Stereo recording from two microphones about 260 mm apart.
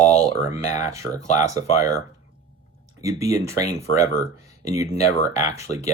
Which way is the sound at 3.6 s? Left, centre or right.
Left.